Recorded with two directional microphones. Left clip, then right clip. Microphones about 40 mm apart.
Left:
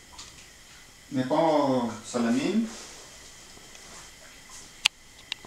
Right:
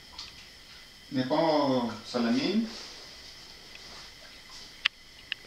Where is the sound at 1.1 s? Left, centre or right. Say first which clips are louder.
Left 3 dB; centre.